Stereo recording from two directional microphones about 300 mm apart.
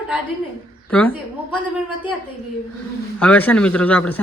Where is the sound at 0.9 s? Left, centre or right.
Centre.